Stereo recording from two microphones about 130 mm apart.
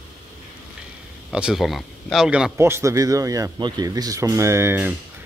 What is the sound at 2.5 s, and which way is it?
Speech, 20° right (ahead or behind).